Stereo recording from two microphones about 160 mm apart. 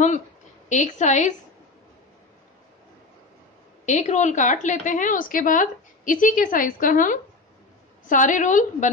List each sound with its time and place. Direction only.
0.7 s a woman's voice: 50° left (ahead or behind)
3.8 s a woman's voice: 45° left (ahead or behind)